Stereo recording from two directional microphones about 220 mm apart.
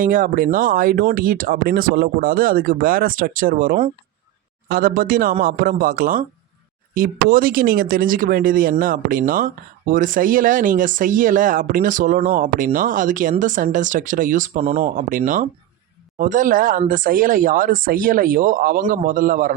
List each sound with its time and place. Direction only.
0.0 s speech: 35° right (ahead or behind)